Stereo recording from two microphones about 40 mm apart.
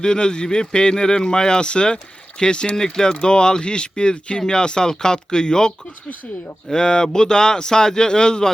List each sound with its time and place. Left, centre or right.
0.0 s speech: left